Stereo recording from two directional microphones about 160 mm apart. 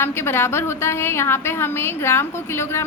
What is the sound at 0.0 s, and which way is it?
A woman's voice, 15° left (ahead or behind).